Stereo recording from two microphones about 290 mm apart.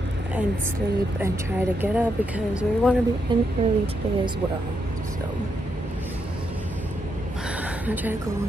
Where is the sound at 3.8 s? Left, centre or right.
Centre.